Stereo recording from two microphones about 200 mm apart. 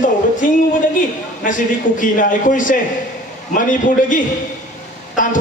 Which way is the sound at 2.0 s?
40° left (ahead or behind).